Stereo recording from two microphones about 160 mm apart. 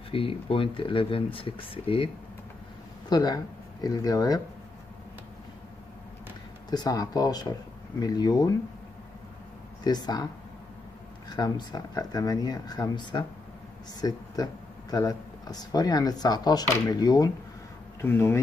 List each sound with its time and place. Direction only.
0.1 s speech: 35° left (ahead or behind)
3.1 s speech: 25° left (ahead or behind)
6.7 s speech: 25° left (ahead or behind)
9.8 s speech: 25° left (ahead or behind)
11.2 s speech: 25° left (ahead or behind)